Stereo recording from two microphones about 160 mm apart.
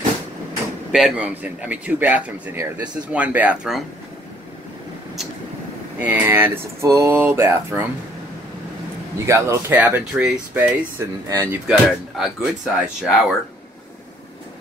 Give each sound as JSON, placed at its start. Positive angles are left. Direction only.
{"t": 0.9, "sound": "speech", "side_deg": -5}
{"t": 5.9, "sound": "speech", "side_deg": -10}
{"t": 9.2, "sound": "speech", "side_deg": -20}
{"t": 10.6, "sound": "speech", "side_deg": -20}
{"t": 11.6, "sound": "speech", "side_deg": -5}